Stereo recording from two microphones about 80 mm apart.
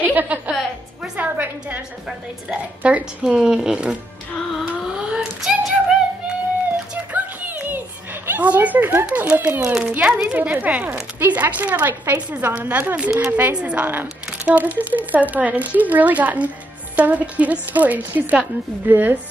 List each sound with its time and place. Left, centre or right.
0.0 s a sound: right
0.5 s music: centre
1.1 s music: right
2.0 s a woman's voice: centre
5.1 s child singing: centre
7.1 s a sound: centre
8.3 s a woman's voice: right